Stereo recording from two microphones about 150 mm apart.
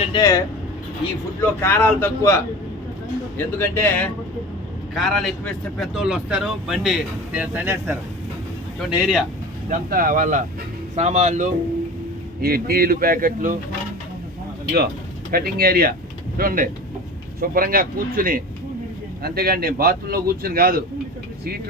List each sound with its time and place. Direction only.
0.2 s speech: 20° left (ahead or behind)
4.9 s speech: centre (ahead or behind)
8.8 s speech: 5° right (ahead or behind)
9.6 s speech: 65° right (ahead or behind)
10.9 s speech: 50° right (ahead or behind)
12.4 s speech: 90° right; by 13.6 s 65° right (ahead or behind)
15.3 s a man's voice: 90° right
16.4 s speech: 70° right (ahead or behind)
19.2 s a man's voice: 90° right